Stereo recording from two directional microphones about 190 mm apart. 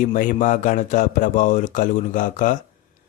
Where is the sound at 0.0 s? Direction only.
45° left (ahead or behind).